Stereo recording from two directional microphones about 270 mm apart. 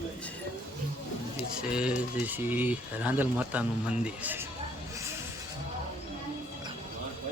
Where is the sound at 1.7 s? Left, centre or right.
Centre.